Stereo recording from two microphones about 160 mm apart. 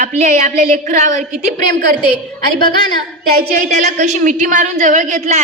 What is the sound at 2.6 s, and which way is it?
Speech, 30° left (ahead or behind).